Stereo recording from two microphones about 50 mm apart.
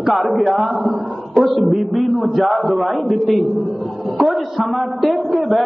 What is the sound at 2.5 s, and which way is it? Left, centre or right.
Speech, left.